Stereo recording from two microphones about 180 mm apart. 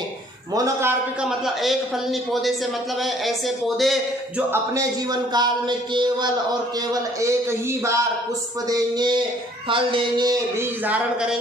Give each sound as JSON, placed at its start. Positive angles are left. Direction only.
{"t": 0.6, "sound": "a man's voice", "side_deg": -15}
{"t": 1.2, "sound": "speech", "side_deg": 0}
{"t": 3.0, "sound": "speech", "side_deg": 0}
{"t": 5.3, "sound": "a sound", "side_deg": -25}
{"t": 6.9, "sound": "a man's voice", "side_deg": -20}
{"t": 8.6, "sound": "a sound", "side_deg": -20}
{"t": 10.9, "sound": "a man's voice", "side_deg": -5}